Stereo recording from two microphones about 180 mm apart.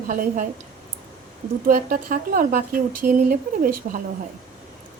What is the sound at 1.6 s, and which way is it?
A woman's voice, 50° right (ahead or behind).